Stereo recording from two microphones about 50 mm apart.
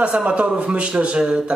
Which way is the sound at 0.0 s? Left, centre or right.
Right.